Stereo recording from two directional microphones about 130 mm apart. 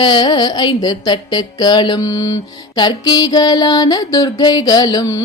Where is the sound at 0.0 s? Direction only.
35° left (ahead or behind).